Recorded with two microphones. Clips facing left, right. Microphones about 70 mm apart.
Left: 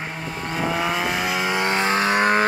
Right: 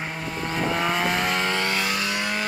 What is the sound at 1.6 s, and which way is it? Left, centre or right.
Vehicle, left.